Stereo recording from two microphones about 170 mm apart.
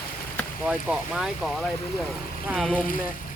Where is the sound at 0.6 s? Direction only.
5° right (ahead or behind).